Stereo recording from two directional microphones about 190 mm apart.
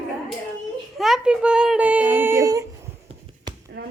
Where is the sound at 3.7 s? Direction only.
55° right (ahead or behind).